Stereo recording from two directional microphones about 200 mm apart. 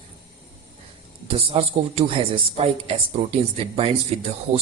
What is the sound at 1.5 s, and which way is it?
A man's voice, 30° right (ahead or behind).